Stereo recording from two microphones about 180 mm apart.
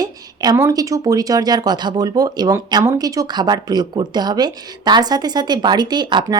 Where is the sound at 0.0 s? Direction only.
20° right (ahead or behind).